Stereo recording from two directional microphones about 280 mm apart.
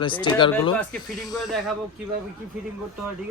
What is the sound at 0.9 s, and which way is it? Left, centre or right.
Speech, centre.